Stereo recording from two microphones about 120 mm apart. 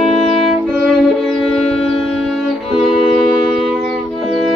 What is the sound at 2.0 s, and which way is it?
Music, centre (ahead or behind).